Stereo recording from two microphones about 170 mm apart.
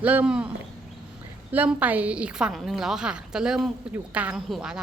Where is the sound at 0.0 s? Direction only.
10° right (ahead or behind).